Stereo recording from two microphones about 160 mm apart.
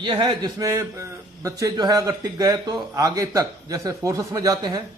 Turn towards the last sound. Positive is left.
turn(degrees=-25)  # may be behind; listen again after turning